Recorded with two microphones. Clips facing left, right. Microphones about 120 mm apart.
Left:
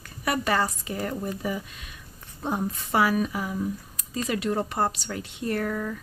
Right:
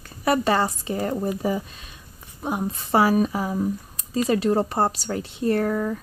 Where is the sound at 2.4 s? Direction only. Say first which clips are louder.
Right 2 dB; 15° right (ahead or behind).